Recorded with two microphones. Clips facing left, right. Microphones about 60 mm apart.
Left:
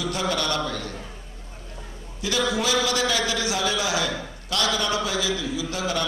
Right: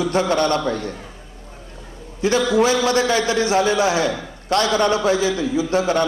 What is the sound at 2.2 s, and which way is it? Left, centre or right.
A man's voice, right.